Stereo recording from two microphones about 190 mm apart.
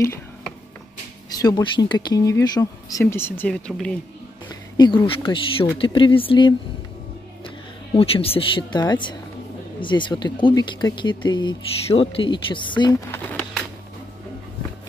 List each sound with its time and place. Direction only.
1.4 s speech: 20° left (ahead or behind); by 3.9 s 5° left (ahead or behind)
4.5 s speech: 20° left (ahead or behind)
13.1 s a sound: 10° left (ahead or behind)